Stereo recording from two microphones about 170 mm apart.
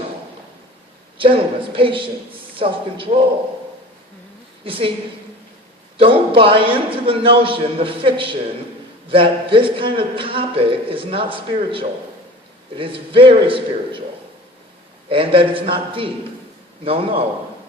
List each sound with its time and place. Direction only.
1.2 s a man's voice: 30° right (ahead or behind)
4.6 s a man's voice: 30° right (ahead or behind)
6.0 s a man's voice: 30° right (ahead or behind)
15.1 s a man's voice: 30° right (ahead or behind)